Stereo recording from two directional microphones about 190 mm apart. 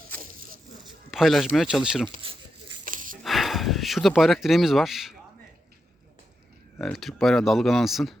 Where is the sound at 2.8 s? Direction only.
45° right (ahead or behind).